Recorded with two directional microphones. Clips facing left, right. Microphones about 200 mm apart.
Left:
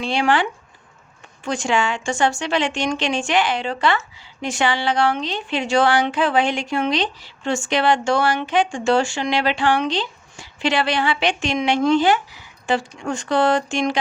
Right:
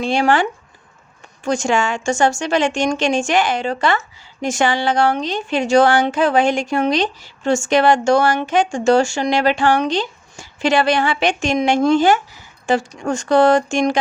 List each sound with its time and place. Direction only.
0.0 s a woman's voice: 45° right (ahead or behind)
1.5 s a woman's voice: 45° right (ahead or behind)